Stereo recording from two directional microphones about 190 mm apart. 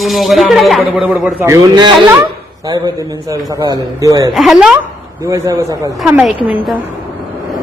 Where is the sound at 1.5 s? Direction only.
20° right (ahead or behind).